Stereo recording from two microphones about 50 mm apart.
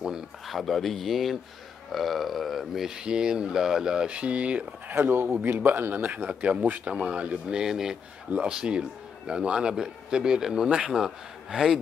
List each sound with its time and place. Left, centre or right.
0.5 s speech: centre
3.0 s a man's voice: centre
4.9 s a man's voice: right; by 11.8 s centre